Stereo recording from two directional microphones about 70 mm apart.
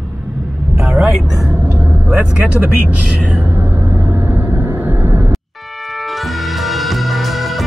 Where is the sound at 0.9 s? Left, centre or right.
Centre.